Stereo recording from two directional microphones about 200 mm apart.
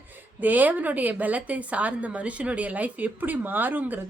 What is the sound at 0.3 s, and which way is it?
A woman's voice, 10° right (ahead or behind).